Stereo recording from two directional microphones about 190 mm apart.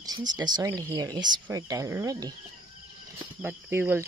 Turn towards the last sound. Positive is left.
turn(degrees=-10)  # may be behind; listen again after turning